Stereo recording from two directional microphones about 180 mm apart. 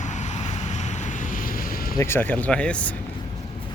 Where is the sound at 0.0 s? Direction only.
40° left (ahead or behind).